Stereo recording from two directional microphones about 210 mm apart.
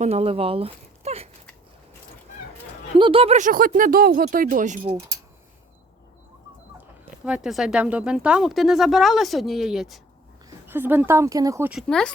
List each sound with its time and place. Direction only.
0.0 s speech: 30° right (ahead or behind)
3.0 s speech: 25° right (ahead or behind)
7.3 s speech: 5° right (ahead or behind)
11.7 s speech: centre (ahead or behind)